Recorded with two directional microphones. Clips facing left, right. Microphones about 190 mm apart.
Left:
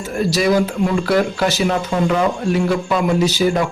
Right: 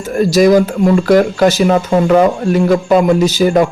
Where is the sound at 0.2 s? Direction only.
45° right (ahead or behind).